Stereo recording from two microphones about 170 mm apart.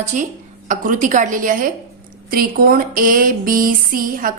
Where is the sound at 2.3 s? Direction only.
60° right (ahead or behind).